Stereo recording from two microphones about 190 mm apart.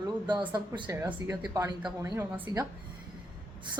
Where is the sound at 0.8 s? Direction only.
10° right (ahead or behind).